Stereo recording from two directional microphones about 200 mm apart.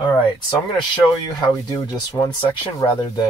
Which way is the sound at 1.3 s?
20° left (ahead or behind).